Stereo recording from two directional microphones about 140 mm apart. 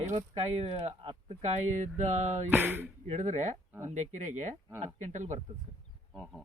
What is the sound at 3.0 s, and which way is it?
Speech, 60° right (ahead or behind).